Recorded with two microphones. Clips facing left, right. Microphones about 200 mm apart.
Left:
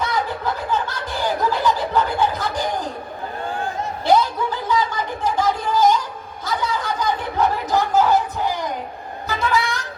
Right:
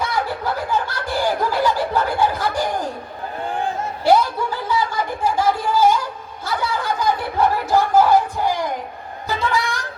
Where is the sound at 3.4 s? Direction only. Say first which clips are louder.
Right 2 dB; 15° right (ahead or behind).